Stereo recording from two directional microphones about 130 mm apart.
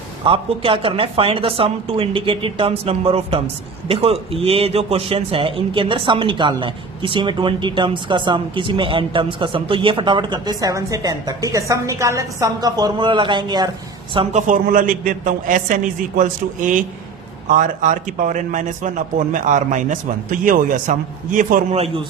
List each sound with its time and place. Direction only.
0.3 s a woman's voice: 45° right (ahead or behind)
14.3 s a man's voice: 90° right; by 20.0 s 75° right (ahead or behind)
20.4 s a man's voice: 90° right
21.7 s a man's voice: 50° right (ahead or behind)